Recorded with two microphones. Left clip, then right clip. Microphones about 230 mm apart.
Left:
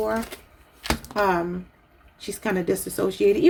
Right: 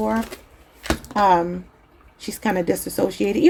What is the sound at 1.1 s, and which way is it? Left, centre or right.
Speech, right.